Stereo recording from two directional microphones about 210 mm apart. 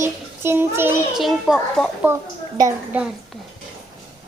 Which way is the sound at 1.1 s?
Centre (ahead or behind).